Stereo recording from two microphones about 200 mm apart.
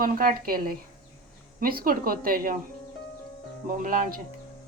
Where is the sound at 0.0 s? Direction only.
45° right (ahead or behind).